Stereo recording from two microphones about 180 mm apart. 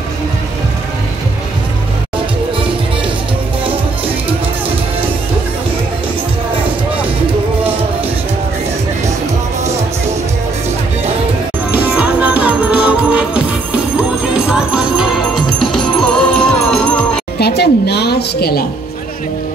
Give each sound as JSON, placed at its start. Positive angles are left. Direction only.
{"t": 11.7, "sound": "music", "side_deg": -10}
{"t": 17.4, "sound": "music", "side_deg": 65}